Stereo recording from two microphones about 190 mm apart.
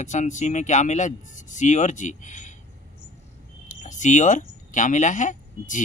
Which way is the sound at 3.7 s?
40° left (ahead or behind).